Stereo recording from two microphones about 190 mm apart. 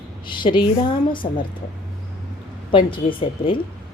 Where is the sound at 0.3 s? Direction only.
25° left (ahead or behind).